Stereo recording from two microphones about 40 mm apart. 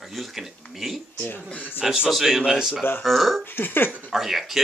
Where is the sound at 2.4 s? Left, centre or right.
Centre.